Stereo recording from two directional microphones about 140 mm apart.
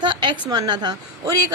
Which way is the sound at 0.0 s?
35° right (ahead or behind).